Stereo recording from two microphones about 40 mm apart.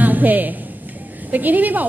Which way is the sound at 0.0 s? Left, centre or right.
Right.